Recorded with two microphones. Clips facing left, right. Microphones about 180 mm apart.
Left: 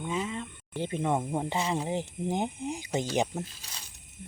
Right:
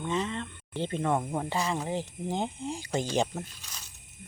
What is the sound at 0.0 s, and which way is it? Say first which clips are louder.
Speech: right 2 dB; 5° left (ahead or behind).